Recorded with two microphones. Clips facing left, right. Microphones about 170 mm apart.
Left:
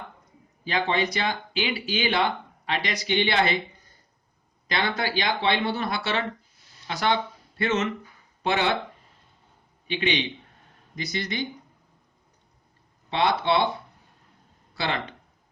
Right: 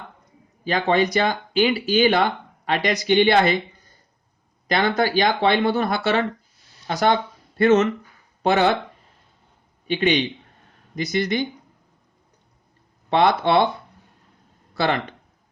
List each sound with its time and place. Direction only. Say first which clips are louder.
0.6 s speech: right 6 dB; 45° right (ahead or behind)
4.7 s speech: right 7 dB; 45° right (ahead or behind)
9.8 s a man's voice: right 6 dB; 45° right (ahead or behind)
13.1 s speech: right 5 dB; 50° right (ahead or behind)
14.8 s speech: right 7 dB; 50° right (ahead or behind)